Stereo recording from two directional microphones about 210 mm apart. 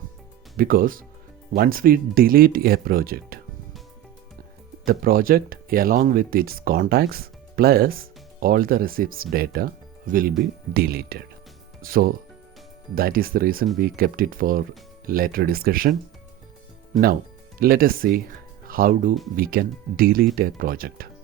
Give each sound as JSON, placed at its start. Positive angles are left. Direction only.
{"t": 0.5, "sound": "speech", "side_deg": -40}
{"t": 4.9, "sound": "speech", "side_deg": -45}
{"t": 17.6, "sound": "speech", "side_deg": -45}